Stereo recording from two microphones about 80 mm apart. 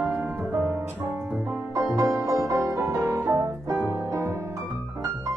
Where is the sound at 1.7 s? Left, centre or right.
Right.